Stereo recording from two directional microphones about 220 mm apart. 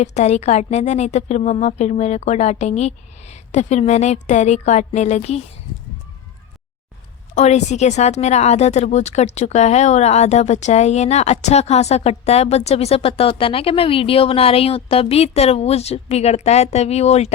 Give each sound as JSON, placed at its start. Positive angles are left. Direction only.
{"t": 0.0, "sound": "speech", "side_deg": 30}
{"t": 7.3, "sound": "speech", "side_deg": 30}